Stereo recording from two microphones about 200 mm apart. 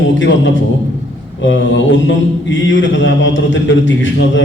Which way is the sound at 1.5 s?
70° left (ahead or behind).